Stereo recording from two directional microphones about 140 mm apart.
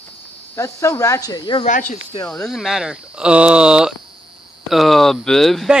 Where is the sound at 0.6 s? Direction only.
20° left (ahead or behind).